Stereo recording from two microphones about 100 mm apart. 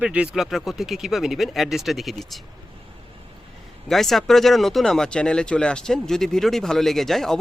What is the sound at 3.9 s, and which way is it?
Speech, centre (ahead or behind).